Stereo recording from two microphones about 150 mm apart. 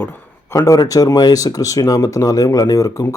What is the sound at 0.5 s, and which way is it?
Speech, 20° left (ahead or behind).